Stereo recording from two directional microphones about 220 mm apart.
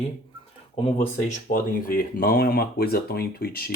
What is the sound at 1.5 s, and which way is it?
Speech, 40° left (ahead or behind).